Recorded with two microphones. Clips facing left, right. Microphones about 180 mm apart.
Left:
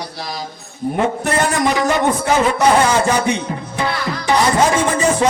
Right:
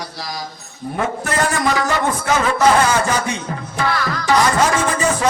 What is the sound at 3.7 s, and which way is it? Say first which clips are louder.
Speech: right 1 dB; 20° left (ahead or behind).